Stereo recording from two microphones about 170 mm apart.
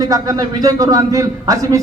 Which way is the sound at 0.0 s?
20° right (ahead or behind).